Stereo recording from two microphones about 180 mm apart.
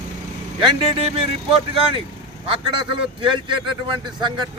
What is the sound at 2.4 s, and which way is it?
A man's voice, 30° right (ahead or behind).